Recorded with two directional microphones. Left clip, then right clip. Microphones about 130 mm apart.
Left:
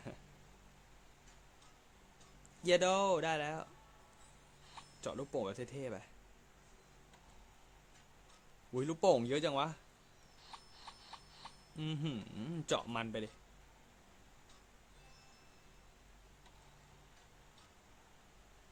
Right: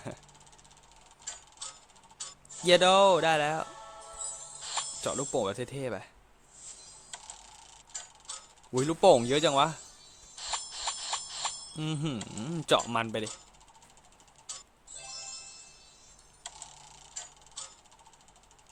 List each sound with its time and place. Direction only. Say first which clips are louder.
2.6 s speech: right 10 dB; 35° right (ahead or behind)
5.0 s speech: right 8 dB; 30° right (ahead or behind)
8.8 s speech: right 10 dB; 40° right (ahead or behind)
10.4 s a sound: right 19 dB; 85° right
11.8 s speech: right 7 dB; 25° right (ahead or behind)